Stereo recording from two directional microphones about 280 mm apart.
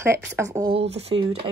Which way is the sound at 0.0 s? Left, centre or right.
Centre.